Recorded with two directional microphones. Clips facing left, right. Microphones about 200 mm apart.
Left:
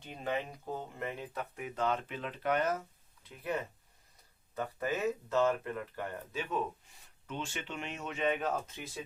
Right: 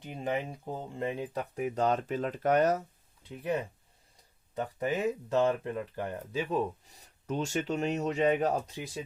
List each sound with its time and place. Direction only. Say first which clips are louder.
0.0 s speech: right 3 dB; 15° right (ahead or behind)
1.5 s speech: right 6 dB; 40° right (ahead or behind)
3.4 s speech: right 4 dB; 15° right (ahead or behind)
6.3 s speech: right 6 dB; 35° right (ahead or behind)